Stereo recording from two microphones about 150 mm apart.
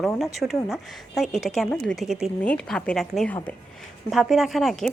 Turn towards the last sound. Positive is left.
turn(degrees=0)  # may be behind; listen again after turning